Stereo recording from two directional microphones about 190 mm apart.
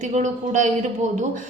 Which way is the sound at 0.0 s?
40° right (ahead or behind).